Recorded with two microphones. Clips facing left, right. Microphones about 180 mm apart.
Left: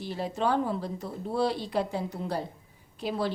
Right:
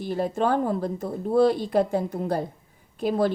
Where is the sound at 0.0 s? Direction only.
50° right (ahead or behind).